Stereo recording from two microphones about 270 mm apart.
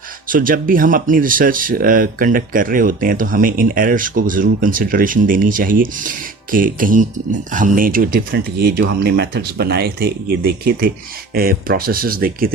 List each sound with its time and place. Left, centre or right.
0.3 s speech: right